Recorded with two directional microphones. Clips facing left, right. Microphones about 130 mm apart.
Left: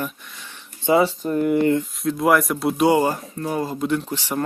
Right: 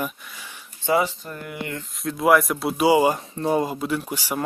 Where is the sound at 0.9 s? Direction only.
25° left (ahead or behind).